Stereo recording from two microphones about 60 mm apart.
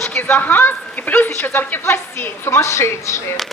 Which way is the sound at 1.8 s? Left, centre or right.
Left.